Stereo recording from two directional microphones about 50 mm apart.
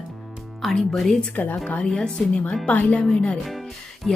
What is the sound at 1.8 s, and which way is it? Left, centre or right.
Speech, centre.